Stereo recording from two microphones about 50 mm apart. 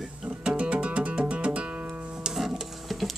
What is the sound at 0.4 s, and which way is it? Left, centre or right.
Music, right.